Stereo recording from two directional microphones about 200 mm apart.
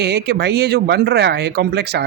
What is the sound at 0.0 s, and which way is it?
Speech, 55° right (ahead or behind).